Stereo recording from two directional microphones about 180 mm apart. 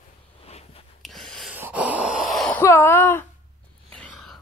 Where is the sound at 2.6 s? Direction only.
15° left (ahead or behind).